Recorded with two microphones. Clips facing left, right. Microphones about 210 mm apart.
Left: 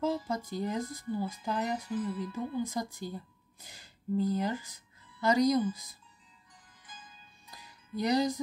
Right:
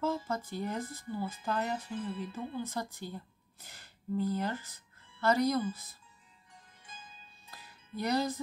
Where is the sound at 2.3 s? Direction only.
10° left (ahead or behind).